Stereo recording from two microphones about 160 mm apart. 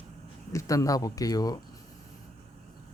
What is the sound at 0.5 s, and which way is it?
Speech, 20° left (ahead or behind).